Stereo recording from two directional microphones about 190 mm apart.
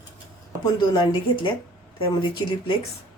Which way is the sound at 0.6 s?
25° left (ahead or behind).